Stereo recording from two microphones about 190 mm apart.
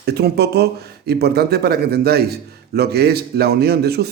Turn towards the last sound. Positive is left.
turn(degrees=-55)  # may be behind; listen again after turning